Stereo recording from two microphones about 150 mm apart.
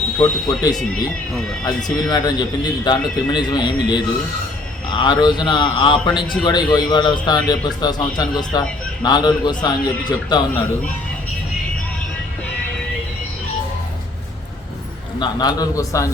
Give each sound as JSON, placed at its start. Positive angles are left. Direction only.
{"t": 0.2, "sound": "a man's voice", "side_deg": 25}
{"t": 1.3, "sound": "speech", "side_deg": 5}
{"t": 1.6, "sound": "a man's voice", "side_deg": 25}
{"t": 15.2, "sound": "a man's voice", "side_deg": 25}